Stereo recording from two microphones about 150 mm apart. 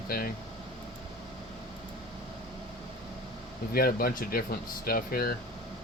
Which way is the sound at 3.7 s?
85° left.